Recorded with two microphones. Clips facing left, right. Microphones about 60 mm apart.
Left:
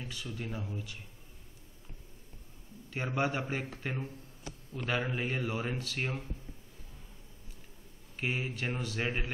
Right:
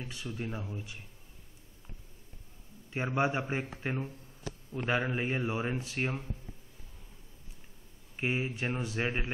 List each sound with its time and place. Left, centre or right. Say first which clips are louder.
0.0 s speech: right 2 dB; right
2.9 s speech: right 2 dB; right
8.2 s speech: right 2 dB; right